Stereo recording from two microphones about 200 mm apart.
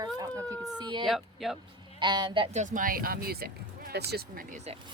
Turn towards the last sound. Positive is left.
turn(degrees=-45)  # may be behind; listen again after turning